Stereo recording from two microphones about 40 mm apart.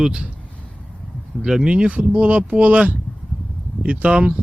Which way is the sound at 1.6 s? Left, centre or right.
Right.